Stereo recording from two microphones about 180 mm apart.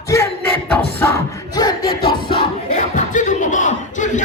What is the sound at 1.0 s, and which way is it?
Crowd, 15° left (ahead or behind).